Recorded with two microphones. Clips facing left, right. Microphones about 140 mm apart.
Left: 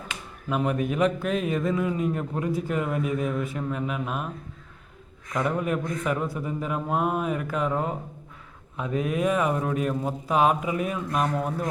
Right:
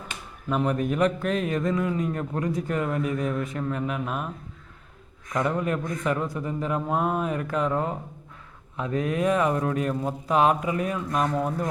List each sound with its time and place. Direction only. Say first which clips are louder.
0.4 s a man's voice: right 1 dB; 10° left (ahead or behind)
5.3 s a man's voice: even; 10° left (ahead or behind)